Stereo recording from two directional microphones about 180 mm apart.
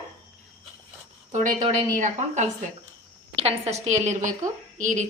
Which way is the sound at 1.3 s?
45° right (ahead or behind).